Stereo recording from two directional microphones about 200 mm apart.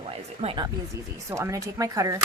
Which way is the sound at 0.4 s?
20° right (ahead or behind).